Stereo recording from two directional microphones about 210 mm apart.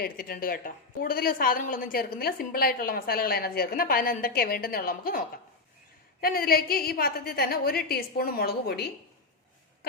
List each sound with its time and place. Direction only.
0.0 s a woman's voice: 45° left (ahead or behind)